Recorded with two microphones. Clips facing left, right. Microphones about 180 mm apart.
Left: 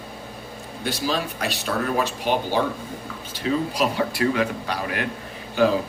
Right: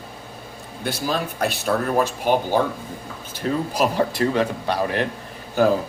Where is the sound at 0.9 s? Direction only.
50° right (ahead or behind).